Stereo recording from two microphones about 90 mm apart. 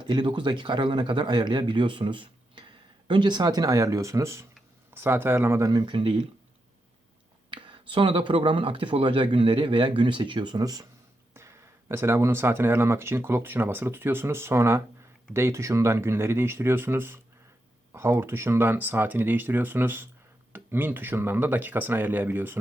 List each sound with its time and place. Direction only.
0.0 s speech: 55° right (ahead or behind); by 5.7 s 30° right (ahead or behind)
5.7 s speech: 65° right (ahead or behind)
7.5 s speech: 70° right (ahead or behind); by 10.8 s 45° right (ahead or behind)
11.3 s speech: 30° right (ahead or behind)